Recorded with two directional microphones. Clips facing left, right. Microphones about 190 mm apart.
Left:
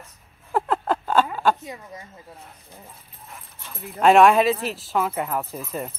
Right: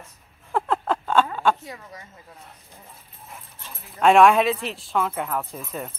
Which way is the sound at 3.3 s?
Centre (ahead or behind).